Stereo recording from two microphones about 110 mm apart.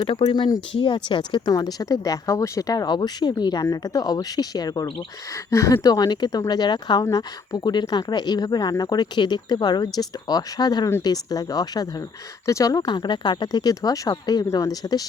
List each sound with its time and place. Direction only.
0.0 s speech: 50° left (ahead or behind)
0.7 s speech: 55° left (ahead or behind); by 15.0 s 35° left (ahead or behind)